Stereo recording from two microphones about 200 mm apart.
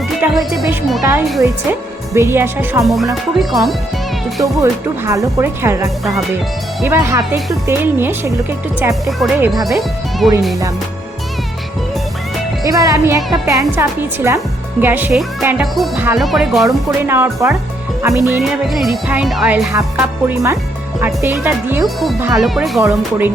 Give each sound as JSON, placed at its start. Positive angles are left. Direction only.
{"t": 0.2, "sound": "music", "side_deg": 0}
{"t": 2.1, "sound": "a woman's voice", "side_deg": -10}
{"t": 2.8, "sound": "music", "side_deg": 0}
{"t": 4.6, "sound": "a woman's voice", "side_deg": -15}
{"t": 9.0, "sound": "music", "side_deg": 0}
{"t": 12.6, "sound": "a woman's voice", "side_deg": -15}
{"t": 16.0, "sound": "music", "side_deg": 0}
{"t": 16.6, "sound": "a woman's voice", "side_deg": -10}
{"t": 18.1, "sound": "music", "side_deg": 15}
{"t": 18.5, "sound": "music", "side_deg": 0}
{"t": 19.7, "sound": "a woman's voice", "side_deg": -10}
{"t": 22.4, "sound": "music", "side_deg": 0}
{"t": 22.9, "sound": "a woman's voice", "side_deg": -10}